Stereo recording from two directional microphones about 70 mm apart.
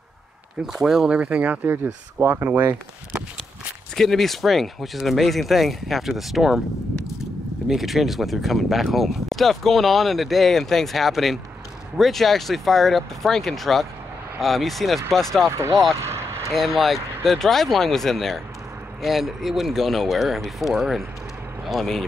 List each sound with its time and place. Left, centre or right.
0.7 s speech: centre
2.2 s speech: right
2.7 s speech: centre
3.9 s speech: centre
7.6 s speech: centre
16.0 s vehicle: right
16.5 s speech: centre